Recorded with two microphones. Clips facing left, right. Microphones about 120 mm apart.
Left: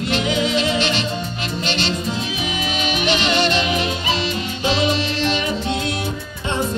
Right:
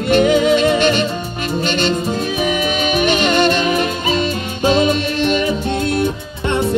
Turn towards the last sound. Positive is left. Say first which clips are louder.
# right 4 dB
turn(degrees=-50)  # may be behind; listen again after turning